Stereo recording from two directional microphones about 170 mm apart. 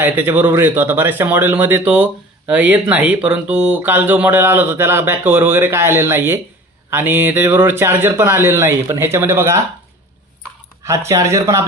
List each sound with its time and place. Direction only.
0.0 s speech: 10° right (ahead or behind)
10.8 s speech: 20° right (ahead or behind)